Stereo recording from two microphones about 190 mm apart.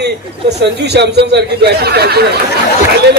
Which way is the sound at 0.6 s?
60° right (ahead or behind).